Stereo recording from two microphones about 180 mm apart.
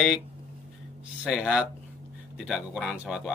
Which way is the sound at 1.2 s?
5° right (ahead or behind).